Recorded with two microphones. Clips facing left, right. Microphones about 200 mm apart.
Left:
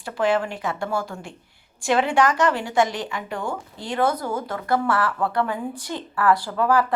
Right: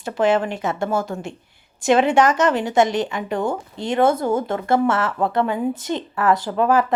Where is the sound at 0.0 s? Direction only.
20° right (ahead or behind).